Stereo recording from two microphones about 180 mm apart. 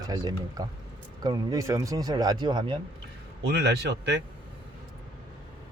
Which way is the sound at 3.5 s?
65° right (ahead or behind).